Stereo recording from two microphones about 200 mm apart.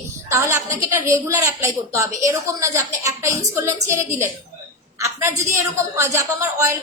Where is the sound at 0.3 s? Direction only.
15° right (ahead or behind).